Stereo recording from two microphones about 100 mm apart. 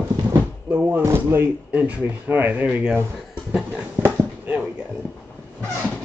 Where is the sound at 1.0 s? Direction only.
25° right (ahead or behind).